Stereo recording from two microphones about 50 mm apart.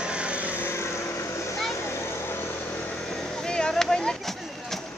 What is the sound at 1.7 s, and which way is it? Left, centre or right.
Vehicle, left.